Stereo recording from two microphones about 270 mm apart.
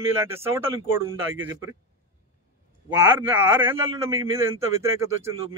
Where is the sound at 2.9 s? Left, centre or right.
Centre.